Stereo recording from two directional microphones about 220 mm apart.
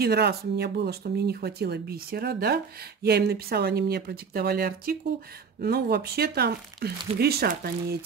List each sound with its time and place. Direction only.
0.0 s speech: 45° right (ahead or behind)